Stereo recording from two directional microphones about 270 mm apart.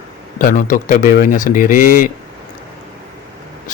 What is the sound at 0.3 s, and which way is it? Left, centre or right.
Speech, left.